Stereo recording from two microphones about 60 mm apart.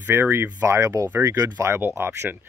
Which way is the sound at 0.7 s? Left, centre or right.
Right.